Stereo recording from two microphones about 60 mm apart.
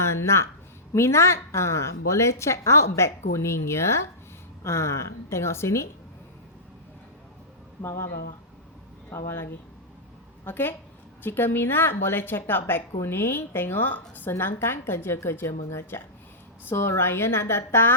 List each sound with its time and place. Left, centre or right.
0.0 s a woman's voice: left
7.8 s speech: left
9.0 s speech: left
10.4 s a woman's voice: left